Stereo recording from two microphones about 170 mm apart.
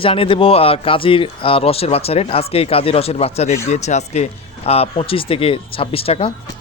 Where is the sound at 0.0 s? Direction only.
30° left (ahead or behind).